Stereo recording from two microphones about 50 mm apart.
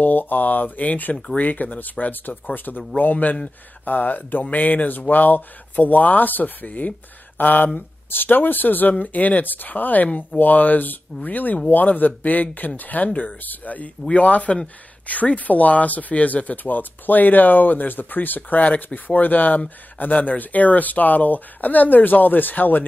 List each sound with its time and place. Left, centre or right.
0.0 s speech: left
10.0 s speech: left
10.4 s speech: left